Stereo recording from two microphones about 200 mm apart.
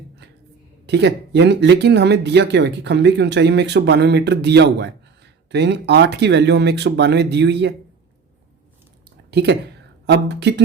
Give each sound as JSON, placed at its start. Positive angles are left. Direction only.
{"t": 0.9, "sound": "speech", "side_deg": -55}
{"t": 9.3, "sound": "speech", "side_deg": -55}